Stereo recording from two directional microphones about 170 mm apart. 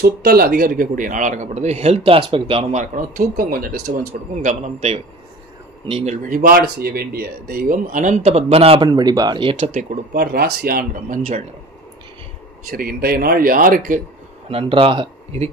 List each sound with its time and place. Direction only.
0.0 s speech: 60° right (ahead or behind); by 2.8 s 35° right (ahead or behind)
2.8 s speech: 50° right (ahead or behind); by 9.6 s 30° right (ahead or behind)
9.6 s speech: 50° right (ahead or behind)
10.1 s speech: 65° right (ahead or behind); by 11.4 s 50° right (ahead or behind)
12.7 s speech: 60° right (ahead or behind)
14.5 s speech: 35° right (ahead or behind)